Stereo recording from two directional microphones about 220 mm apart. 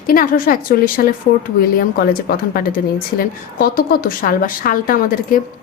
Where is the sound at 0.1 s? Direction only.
40° left (ahead or behind).